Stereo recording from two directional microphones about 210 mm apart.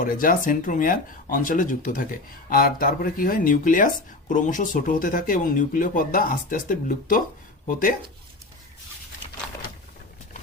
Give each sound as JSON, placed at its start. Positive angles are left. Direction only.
{"t": 0.0, "sound": "speech", "side_deg": 40}